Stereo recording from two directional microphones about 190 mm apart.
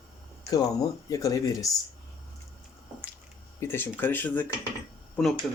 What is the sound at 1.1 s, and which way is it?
Speech, 20° left (ahead or behind).